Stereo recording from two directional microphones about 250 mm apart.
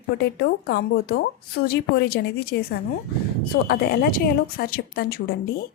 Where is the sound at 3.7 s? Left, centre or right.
Left.